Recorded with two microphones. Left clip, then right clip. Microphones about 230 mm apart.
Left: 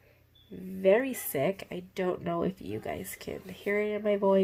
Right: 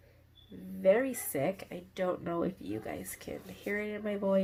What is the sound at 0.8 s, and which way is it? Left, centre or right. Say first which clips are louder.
Speech: left 2 dB; left.